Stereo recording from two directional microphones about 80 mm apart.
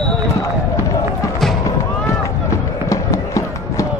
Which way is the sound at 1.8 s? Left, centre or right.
Left.